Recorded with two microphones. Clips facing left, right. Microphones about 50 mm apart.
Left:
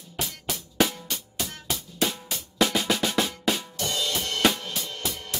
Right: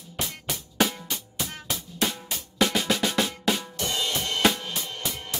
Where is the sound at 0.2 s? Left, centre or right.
Centre.